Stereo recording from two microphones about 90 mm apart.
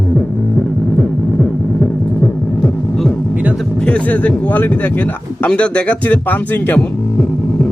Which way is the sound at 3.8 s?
15° left (ahead or behind).